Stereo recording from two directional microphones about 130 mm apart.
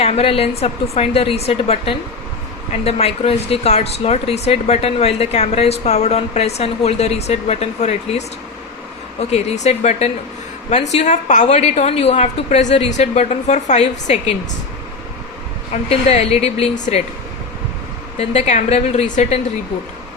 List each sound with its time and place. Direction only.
0.0 s a woman's voice: 50° left (ahead or behind)
9.3 s speech: 55° left (ahead or behind)
15.7 s a woman's voice: 55° left (ahead or behind)
18.2 s speech: 55° left (ahead or behind)